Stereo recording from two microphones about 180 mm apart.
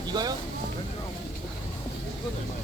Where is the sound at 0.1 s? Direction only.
20° right (ahead or behind).